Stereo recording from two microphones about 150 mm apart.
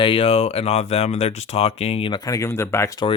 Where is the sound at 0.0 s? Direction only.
35° left (ahead or behind); by 3.1 s 20° left (ahead or behind).